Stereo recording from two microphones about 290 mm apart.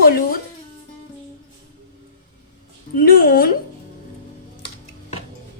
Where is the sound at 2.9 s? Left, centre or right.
Left.